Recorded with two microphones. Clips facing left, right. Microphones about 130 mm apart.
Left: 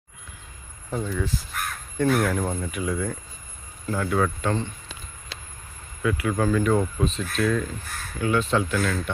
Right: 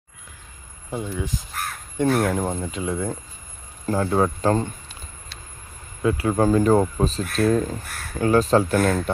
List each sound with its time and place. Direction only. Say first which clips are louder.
0.9 s speech: even; 15° right (ahead or behind)
2.0 s speech: right 2 dB; 30° right (ahead or behind)
6.0 s speech: right 4 dB; 30° right (ahead or behind)
8.8 s speech: right 6 dB; 50° right (ahead or behind)